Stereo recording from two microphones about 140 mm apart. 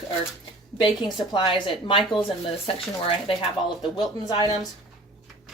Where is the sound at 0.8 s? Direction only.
35° left (ahead or behind).